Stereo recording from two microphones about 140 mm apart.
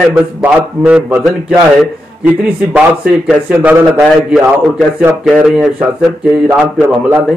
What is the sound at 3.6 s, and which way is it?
Speech, 20° right (ahead or behind).